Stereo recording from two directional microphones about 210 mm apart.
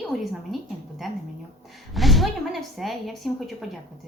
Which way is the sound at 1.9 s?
Centre (ahead or behind).